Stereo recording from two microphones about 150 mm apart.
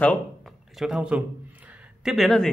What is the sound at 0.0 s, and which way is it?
Speech, 5° left (ahead or behind).